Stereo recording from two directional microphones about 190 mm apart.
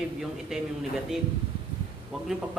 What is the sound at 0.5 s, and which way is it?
Speech, 5° right (ahead or behind).